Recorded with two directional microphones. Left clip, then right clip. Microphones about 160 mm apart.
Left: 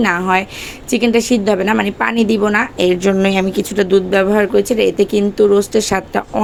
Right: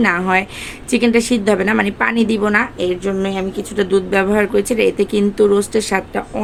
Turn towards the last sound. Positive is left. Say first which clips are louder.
# left 2 dB
turn(degrees=30)  # may be behind; listen again after turning